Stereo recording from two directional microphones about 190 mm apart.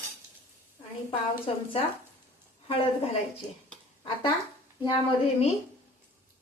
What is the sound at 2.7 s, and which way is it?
Speech, 30° left (ahead or behind).